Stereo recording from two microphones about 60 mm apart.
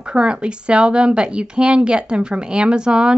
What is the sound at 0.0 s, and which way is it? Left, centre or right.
Speech, centre.